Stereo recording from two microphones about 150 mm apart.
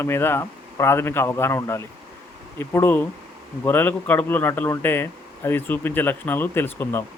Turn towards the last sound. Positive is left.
turn(degrees=15)  # may be behind; listen again after turning